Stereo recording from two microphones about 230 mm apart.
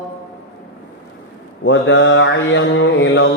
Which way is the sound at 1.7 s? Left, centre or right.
Left.